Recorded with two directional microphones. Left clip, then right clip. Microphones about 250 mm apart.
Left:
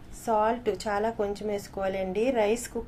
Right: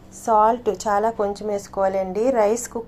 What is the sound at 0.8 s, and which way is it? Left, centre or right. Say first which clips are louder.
A woman's voice: right 9 dB; centre.